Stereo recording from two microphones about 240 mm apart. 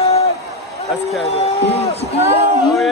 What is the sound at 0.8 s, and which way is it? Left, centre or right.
Speech, centre.